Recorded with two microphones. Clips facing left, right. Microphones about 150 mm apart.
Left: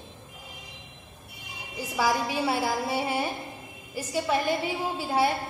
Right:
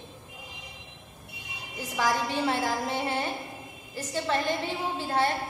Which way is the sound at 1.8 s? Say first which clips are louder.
Left 2 dB; 10° left (ahead or behind).